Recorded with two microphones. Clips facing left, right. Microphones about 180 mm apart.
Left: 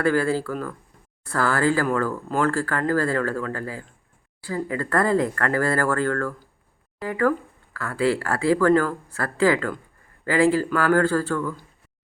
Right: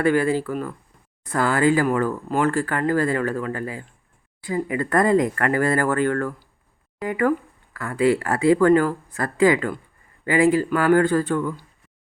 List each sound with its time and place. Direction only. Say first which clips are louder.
0.0 s speech: right 2 dB; 20° right (ahead or behind)